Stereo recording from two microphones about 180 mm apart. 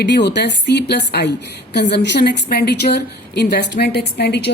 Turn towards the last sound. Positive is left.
turn(degrees=65)  # may be behind; listen again after turning